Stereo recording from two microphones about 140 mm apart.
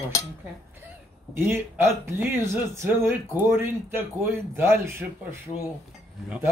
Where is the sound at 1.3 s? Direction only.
15° right (ahead or behind).